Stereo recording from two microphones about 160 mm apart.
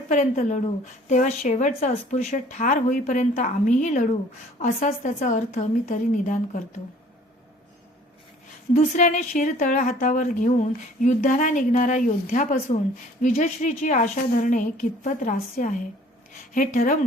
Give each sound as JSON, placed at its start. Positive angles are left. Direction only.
{"t": 0.1, "sound": "a woman's voice", "side_deg": 50}
{"t": 8.7, "sound": "a woman's voice", "side_deg": 55}